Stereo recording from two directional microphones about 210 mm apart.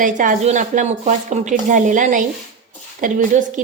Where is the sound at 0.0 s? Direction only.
40° right (ahead or behind).